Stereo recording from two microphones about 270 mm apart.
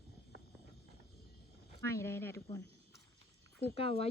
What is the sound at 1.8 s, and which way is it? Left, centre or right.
Speech, centre.